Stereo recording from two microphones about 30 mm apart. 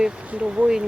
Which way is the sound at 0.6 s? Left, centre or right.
Right.